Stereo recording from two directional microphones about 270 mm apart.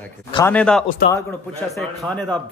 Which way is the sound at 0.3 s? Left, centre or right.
Centre.